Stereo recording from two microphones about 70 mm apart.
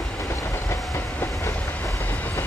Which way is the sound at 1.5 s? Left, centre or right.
Centre.